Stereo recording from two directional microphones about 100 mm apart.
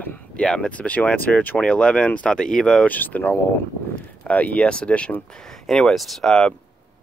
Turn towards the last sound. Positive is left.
turn(degrees=5)  # may be behind; listen again after turning